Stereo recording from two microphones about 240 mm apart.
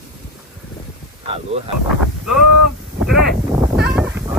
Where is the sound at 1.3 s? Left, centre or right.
Right.